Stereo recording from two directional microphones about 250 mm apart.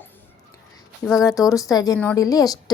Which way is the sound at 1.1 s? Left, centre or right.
Centre.